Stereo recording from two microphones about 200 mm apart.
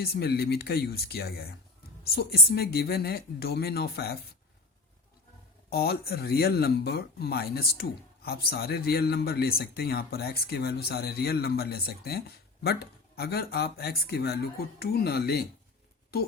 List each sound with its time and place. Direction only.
0.0 s speech: 50° left (ahead or behind)
5.7 s speech: 50° left (ahead or behind)